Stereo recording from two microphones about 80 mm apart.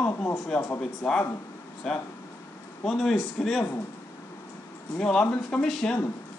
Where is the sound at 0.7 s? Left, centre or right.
Centre.